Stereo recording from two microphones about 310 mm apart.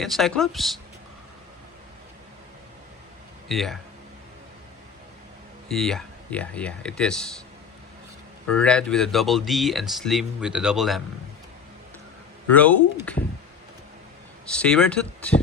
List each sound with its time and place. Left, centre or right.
0.0 s speech: centre
3.5 s speech: centre
5.6 s speech: centre
8.4 s speech: centre
12.5 s speech: centre
14.5 s speech: centre